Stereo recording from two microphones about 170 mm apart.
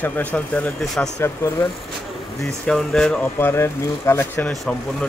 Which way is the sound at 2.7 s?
5° left (ahead or behind).